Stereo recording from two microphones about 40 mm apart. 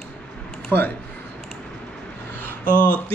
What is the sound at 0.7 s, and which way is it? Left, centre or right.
Speech, left.